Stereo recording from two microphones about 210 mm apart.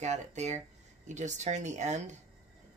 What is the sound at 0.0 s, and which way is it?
Speech, 35° right (ahead or behind).